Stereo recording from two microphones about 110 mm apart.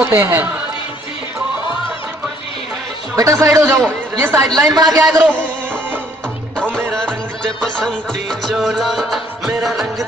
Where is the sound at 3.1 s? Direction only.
30° right (ahead or behind).